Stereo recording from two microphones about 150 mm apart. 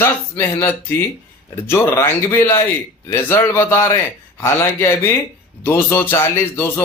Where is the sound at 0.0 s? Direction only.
15° left (ahead or behind).